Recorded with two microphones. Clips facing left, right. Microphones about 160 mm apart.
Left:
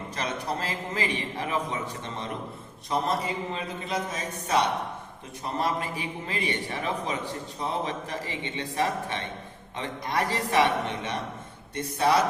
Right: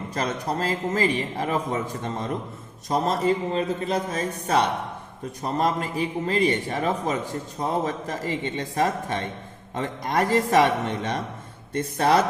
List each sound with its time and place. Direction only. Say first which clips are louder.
0.1 s a man's voice: right 4 dB; 45° right (ahead or behind)
11.7 s speech: right 3 dB; 60° right (ahead or behind)